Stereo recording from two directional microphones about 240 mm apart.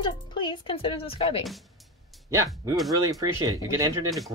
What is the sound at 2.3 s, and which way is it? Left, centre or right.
Speech, centre.